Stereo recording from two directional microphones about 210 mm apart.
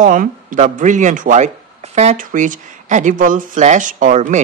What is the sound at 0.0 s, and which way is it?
Speech, 40° right (ahead or behind).